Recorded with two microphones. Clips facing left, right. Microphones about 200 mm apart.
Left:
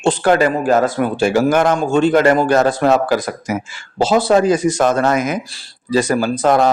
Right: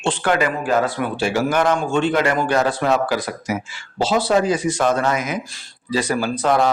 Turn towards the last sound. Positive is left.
turn(degrees=45)  # may be behind; listen again after turning